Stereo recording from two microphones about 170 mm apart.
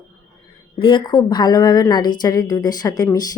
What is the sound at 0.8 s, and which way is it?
Speech, 30° left (ahead or behind).